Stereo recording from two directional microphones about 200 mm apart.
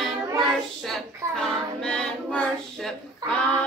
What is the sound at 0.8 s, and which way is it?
Child singing, centre (ahead or behind).